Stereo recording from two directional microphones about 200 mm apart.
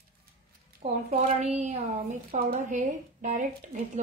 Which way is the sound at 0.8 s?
30° right (ahead or behind).